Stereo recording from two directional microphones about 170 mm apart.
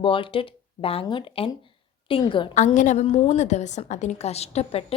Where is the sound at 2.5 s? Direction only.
45° left (ahead or behind).